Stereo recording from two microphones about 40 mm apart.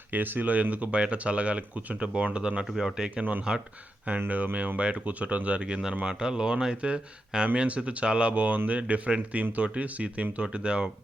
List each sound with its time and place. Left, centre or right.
0.1 s speech: right
0.9 s speech: right
2.6 s speech: centre
2.9 s speech: centre
4.1 s speech: right
4.8 s speech: right